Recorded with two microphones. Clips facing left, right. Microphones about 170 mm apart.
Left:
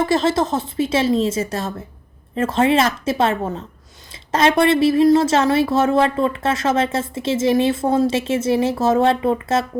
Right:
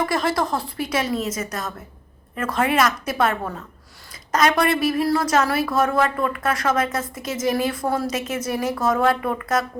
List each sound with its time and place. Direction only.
0.0 s a woman's voice: 25° left (ahead or behind)